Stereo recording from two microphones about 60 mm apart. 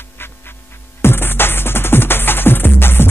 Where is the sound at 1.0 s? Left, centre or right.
Left.